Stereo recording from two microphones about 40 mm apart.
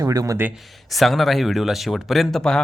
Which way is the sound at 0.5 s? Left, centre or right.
Centre.